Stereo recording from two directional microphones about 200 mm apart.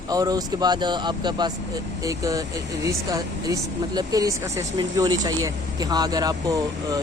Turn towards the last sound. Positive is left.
turn(degrees=-20)  # may be behind; listen again after turning